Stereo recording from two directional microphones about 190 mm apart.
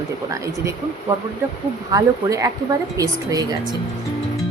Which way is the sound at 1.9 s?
15° right (ahead or behind).